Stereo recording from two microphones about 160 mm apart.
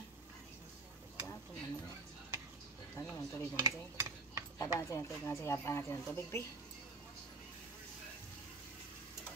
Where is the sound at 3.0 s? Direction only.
20° left (ahead or behind).